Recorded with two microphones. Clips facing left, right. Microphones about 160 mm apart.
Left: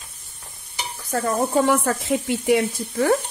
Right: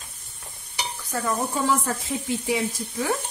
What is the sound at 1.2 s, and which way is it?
Speech, 60° left (ahead or behind).